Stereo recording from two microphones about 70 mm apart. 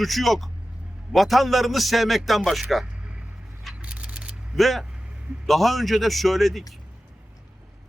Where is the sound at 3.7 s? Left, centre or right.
Centre.